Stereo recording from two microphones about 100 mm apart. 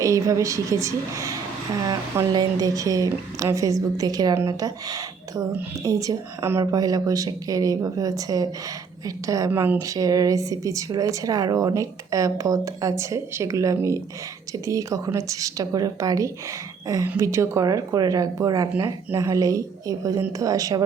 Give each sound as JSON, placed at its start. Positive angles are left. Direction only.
{"t": 0.0, "sound": "speech", "side_deg": -30}
{"t": 9.5, "sound": "speech", "side_deg": -20}
{"t": 9.8, "sound": "a woman's voice", "side_deg": -35}